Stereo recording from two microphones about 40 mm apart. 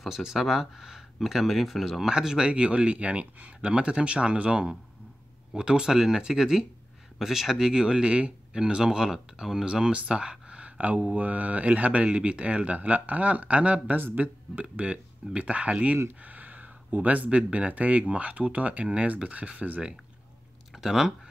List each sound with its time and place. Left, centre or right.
0.2 s speech: centre
2.0 s speech: centre; by 13.9 s right
13.9 s speech: right
14.6 s speech: right
16.2 s a sound: right
17.3 s speech: right
20.7 s speech: centre